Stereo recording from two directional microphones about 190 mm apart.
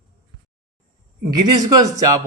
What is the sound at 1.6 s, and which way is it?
Speech, 20° right (ahead or behind).